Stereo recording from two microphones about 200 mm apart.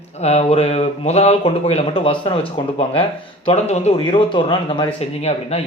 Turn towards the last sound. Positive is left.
turn(degrees=30)  # may be behind; listen again after turning